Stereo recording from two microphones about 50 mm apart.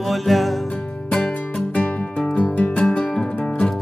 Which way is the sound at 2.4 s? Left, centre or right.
Left.